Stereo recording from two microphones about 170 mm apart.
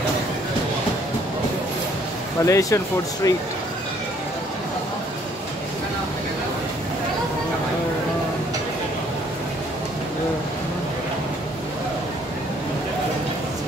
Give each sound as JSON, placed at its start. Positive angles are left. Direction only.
{"t": 2.4, "sound": "speech", "side_deg": 15}